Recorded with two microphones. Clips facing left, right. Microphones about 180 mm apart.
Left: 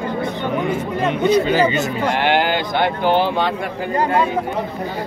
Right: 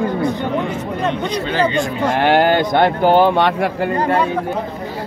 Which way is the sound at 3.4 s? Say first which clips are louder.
Right 4 dB; 75° right (ahead or behind).